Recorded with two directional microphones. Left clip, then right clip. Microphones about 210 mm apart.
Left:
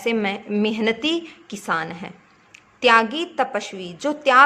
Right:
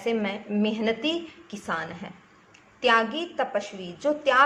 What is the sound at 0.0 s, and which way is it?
A woman's voice, 50° left (ahead or behind).